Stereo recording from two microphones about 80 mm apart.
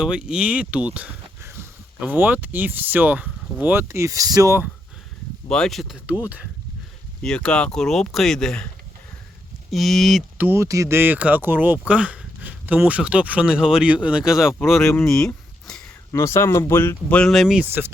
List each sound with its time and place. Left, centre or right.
0.0 s speech: centre
1.4 s a sound: right
2.0 s speech: right
3.8 s speech: right
5.5 s speech: centre
6.1 s speech: centre
7.2 s speech: centre
9.6 s speech: centre
10.3 s speech: right
10.6 s speech: right; by 14.5 s centre
15.0 s speech: centre
16.1 s speech: left
17.2 s speech: centre
17.6 s speech: right